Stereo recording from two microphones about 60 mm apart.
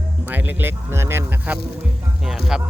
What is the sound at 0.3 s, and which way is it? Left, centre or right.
Speech, right.